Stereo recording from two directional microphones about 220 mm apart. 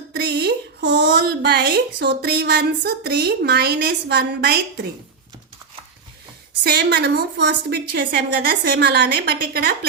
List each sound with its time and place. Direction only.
0.1 s speech: 45° right (ahead or behind)
6.7 s speech: 45° right (ahead or behind)